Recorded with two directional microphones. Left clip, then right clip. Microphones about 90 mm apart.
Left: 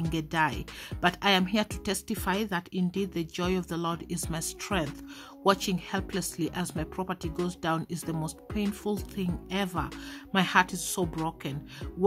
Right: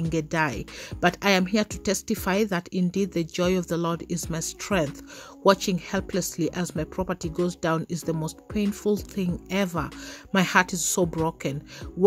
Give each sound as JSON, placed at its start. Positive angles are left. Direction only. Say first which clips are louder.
{"t": 0.1, "sound": "speech", "louder": "right 2 dB", "side_deg": -35}